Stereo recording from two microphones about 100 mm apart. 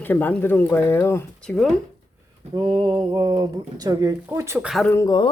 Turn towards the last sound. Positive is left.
turn(degrees=45)  # may be behind; listen again after turning